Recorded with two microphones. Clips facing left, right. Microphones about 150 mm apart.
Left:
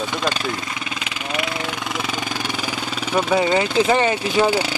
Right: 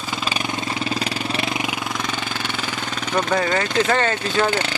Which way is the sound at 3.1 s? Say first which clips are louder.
Left 3 dB; 10° left (ahead or behind).